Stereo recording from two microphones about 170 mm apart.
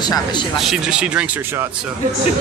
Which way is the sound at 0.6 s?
5° right (ahead or behind).